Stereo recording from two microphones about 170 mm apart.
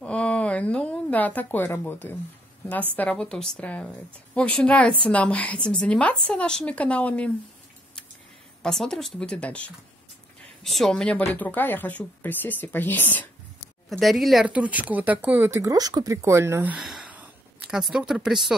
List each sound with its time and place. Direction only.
0.0 s a sound: 5° left (ahead or behind)
2.7 s speech: 10° left (ahead or behind)
8.6 s speech: 5° left (ahead or behind)